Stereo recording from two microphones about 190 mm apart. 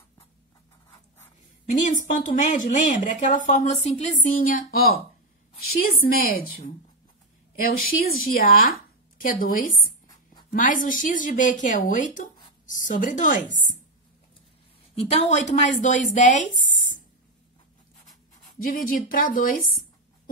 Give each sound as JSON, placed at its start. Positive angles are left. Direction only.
{"t": 1.7, "sound": "a woman's voice", "side_deg": 40}
{"t": 15.0, "sound": "speech", "side_deg": 35}
{"t": 18.6, "sound": "speech", "side_deg": 50}